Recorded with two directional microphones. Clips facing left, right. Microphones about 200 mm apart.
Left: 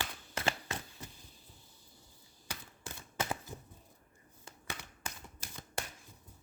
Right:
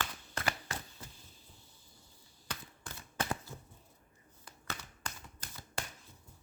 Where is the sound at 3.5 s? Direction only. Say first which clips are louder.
Left 2 dB; 20° left (ahead or behind).